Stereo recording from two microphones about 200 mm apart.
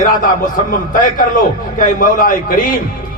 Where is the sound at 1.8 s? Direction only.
45° left (ahead or behind).